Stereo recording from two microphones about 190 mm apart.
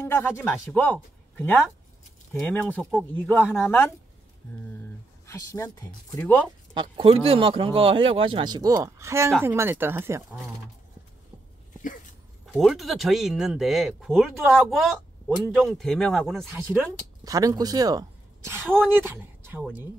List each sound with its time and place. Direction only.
0.0 s a sound: 10° left (ahead or behind)
0.4 s speech: 10° left (ahead or behind)
5.2 s speech: 15° left (ahead or behind)
6.7 s speech: 25° right (ahead or behind)
11.8 s a sound: 45° left (ahead or behind)
12.5 s speech: centre (ahead or behind)
16.7 s speech: 20° right (ahead or behind)